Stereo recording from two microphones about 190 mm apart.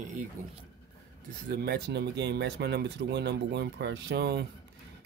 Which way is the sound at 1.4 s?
55° right (ahead or behind).